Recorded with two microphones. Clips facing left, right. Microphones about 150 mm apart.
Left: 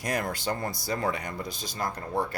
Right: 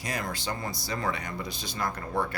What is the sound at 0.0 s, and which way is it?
Speech, 55° left (ahead or behind).